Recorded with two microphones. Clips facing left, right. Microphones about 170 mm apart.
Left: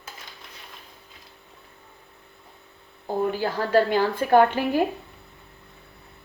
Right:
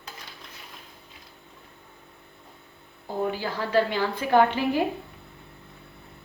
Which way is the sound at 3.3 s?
45° left (ahead or behind).